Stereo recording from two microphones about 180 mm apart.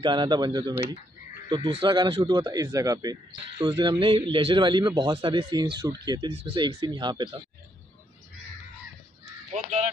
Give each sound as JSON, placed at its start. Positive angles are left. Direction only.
{"t": 0.0, "sound": "speech", "side_deg": -25}
{"t": 9.5, "sound": "speech", "side_deg": -40}